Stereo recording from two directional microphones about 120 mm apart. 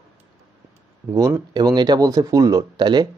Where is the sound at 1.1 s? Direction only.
30° right (ahead or behind).